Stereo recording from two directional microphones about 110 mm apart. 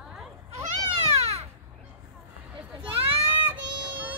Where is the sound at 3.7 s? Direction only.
45° right (ahead or behind).